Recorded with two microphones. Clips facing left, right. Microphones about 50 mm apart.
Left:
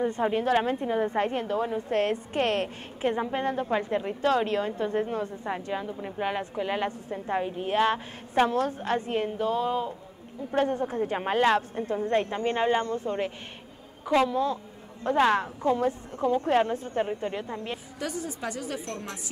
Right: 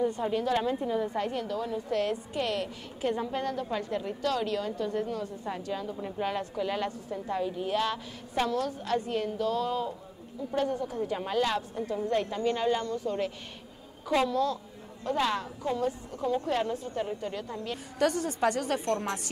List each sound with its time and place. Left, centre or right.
0.0 s a woman's voice: left
10.5 s a woman's voice: left
17.9 s a woman's voice: right
18.9 s a woman's voice: right